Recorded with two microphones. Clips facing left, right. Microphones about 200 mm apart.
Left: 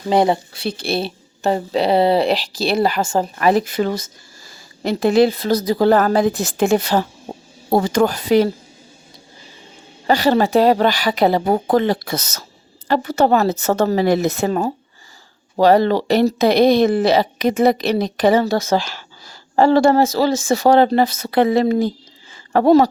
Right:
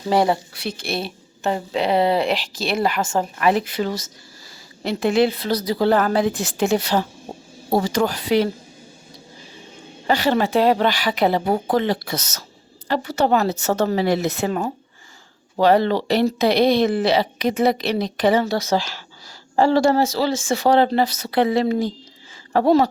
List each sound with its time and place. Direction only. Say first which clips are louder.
0.1 s a woman's voice: left 3 dB; 20° left (ahead or behind); by 8.4 s 45° left (ahead or behind)
10.1 s a woman's voice: left 4 dB; 40° left (ahead or behind)